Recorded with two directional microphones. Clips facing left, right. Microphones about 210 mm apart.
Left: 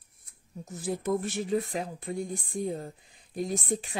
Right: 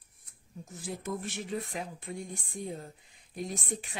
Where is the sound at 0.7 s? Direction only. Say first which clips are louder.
Left 8 dB; 40° left (ahead or behind).